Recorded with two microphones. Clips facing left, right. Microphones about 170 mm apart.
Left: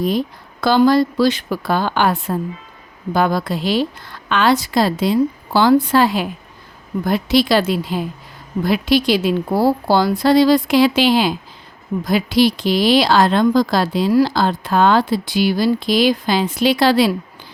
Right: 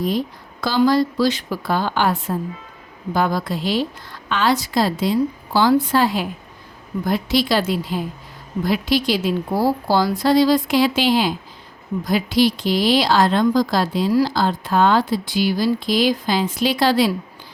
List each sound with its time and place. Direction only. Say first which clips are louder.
0.6 s a woman's voice: left 4 dB; 60° left (ahead or behind)